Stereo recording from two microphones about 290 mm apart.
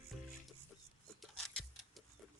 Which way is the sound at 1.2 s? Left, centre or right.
Centre.